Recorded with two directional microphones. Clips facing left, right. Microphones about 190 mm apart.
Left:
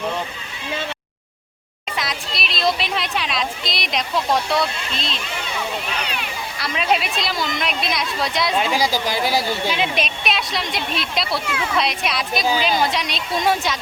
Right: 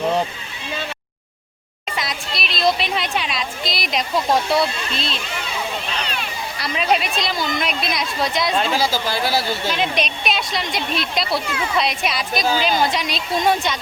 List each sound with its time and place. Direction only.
2.0 s a sound: centre (ahead or behind)
4.5 s speech: 5° right (ahead or behind)
6.0 s a sound: 10° left (ahead or behind)
6.6 s speech: centre (ahead or behind)
8.5 s speech: 15° left (ahead or behind)
9.6 s speech: 5° left (ahead or behind)